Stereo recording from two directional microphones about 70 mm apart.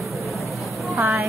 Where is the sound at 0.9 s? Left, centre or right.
Right.